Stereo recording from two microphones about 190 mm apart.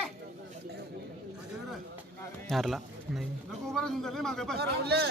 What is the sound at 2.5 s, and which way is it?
Speech, centre (ahead or behind).